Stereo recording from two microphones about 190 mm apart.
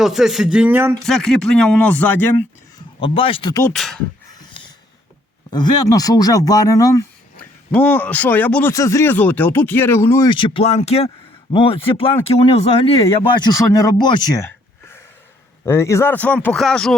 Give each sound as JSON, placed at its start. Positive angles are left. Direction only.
{"t": 0.0, "sound": "speech", "side_deg": 0}
{"t": 1.0, "sound": "speech", "side_deg": 0}
{"t": 3.0, "sound": "speech", "side_deg": 30}
{"t": 3.7, "sound": "speech", "side_deg": 0}
{"t": 4.3, "sound": "a sound", "side_deg": 20}
{"t": 5.5, "sound": "speech", "side_deg": 20}
{"t": 7.3, "sound": "a man's voice", "side_deg": 10}
{"t": 10.2, "sound": "speech", "side_deg": 25}